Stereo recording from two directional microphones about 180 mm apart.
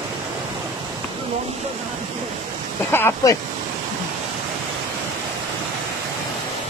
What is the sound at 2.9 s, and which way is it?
Speech, 15° left (ahead or behind).